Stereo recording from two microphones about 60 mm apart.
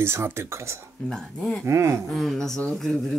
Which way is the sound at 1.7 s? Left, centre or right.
Right.